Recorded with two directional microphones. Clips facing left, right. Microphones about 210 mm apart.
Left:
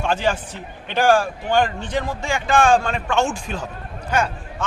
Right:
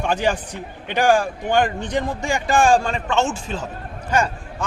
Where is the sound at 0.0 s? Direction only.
15° right (ahead or behind).